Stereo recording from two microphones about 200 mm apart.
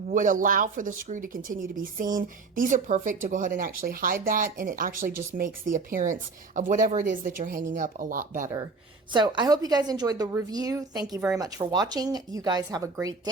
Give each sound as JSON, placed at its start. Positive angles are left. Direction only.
{"t": 0.1, "sound": "speech", "side_deg": -40}
{"t": 9.1, "sound": "a woman's voice", "side_deg": -20}